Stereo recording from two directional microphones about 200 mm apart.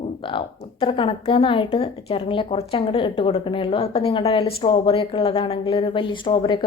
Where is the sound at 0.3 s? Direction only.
25° left (ahead or behind).